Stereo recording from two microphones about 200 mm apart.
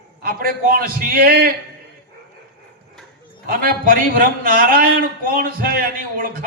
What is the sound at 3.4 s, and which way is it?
A man's voice, 45° right (ahead or behind).